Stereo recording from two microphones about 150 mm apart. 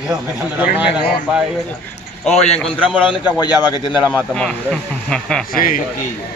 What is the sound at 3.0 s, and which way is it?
A man's voice, 35° left (ahead or behind).